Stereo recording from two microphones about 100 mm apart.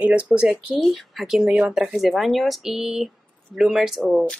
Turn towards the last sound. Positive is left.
turn(degrees=-5)  # may be behind; listen again after turning